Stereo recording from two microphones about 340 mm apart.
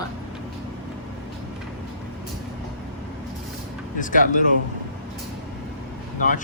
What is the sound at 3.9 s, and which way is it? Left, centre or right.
Speech, left.